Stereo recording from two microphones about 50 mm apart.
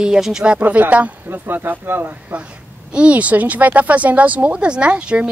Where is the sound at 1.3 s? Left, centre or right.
Right.